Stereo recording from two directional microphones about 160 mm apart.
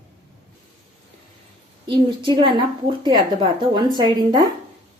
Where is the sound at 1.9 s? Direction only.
30° right (ahead or behind).